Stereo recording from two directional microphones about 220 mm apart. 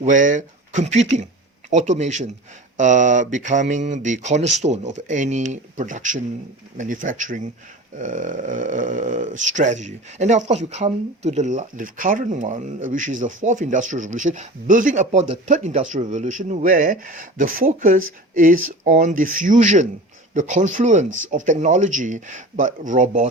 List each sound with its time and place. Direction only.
0.0 s speech: 35° right (ahead or behind)